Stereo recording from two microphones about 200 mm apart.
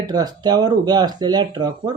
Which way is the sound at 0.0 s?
20° right (ahead or behind).